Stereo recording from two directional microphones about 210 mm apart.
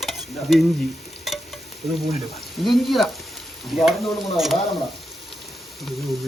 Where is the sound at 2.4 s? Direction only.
Centre (ahead or behind).